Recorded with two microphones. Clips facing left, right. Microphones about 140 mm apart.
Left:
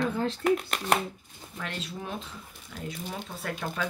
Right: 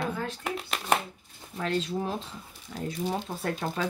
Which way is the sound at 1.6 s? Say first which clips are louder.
Right 8 dB; 35° right (ahead or behind).